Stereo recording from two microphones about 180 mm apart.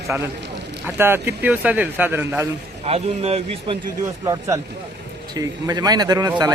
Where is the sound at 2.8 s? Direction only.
35° right (ahead or behind).